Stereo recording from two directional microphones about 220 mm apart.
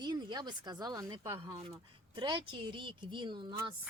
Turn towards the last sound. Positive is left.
turn(degrees=-20)  # may be behind; listen again after turning